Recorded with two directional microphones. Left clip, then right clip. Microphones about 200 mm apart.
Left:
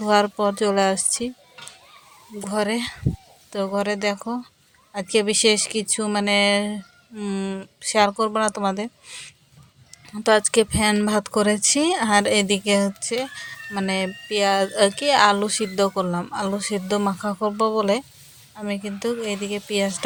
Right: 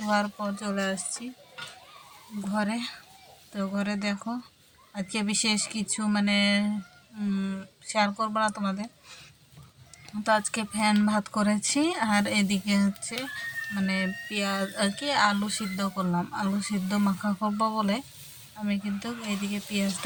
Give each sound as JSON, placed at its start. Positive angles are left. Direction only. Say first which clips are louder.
{"t": 0.1, "sound": "speech", "louder": "left 10 dB", "side_deg": 45}
{"t": 2.4, "sound": "speech", "louder": "left 7 dB", "side_deg": 40}
{"t": 10.2, "sound": "speech", "louder": "left 9 dB", "side_deg": 45}